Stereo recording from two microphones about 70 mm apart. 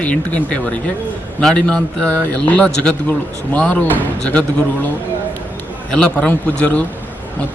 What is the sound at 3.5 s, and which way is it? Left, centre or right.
Speech, centre.